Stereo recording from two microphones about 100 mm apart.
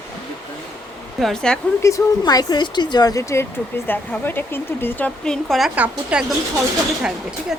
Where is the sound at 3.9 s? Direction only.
20° left (ahead or behind).